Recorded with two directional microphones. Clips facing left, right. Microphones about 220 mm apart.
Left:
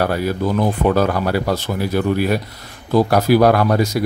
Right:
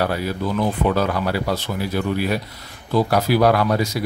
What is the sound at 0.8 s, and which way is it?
Speech, 45° left (ahead or behind).